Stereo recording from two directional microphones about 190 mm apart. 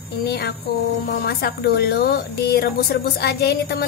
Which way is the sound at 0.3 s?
55° left (ahead or behind).